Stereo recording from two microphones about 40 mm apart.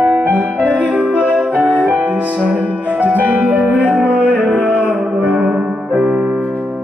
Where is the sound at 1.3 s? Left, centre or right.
Centre.